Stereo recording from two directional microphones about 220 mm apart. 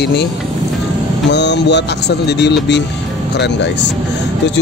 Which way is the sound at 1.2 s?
50° left (ahead or behind).